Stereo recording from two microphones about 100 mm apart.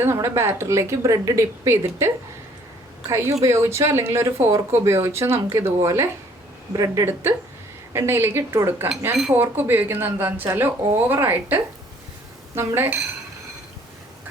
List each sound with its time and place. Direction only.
0.0 s speech: 25° right (ahead or behind)
6.7 s a woman's voice: 35° right (ahead or behind)
7.0 s speech: 25° right (ahead or behind)